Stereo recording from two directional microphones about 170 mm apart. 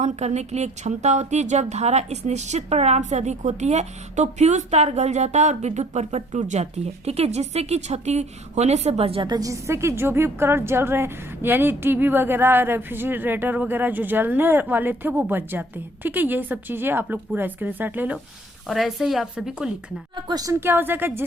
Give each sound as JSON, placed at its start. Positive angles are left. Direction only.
{"t": 0.0, "sound": "a woman's voice", "side_deg": -40}
{"t": 20.2, "sound": "a woman's voice", "side_deg": -20}